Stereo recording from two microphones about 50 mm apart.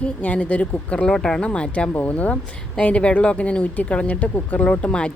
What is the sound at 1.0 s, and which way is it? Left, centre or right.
Speech, centre.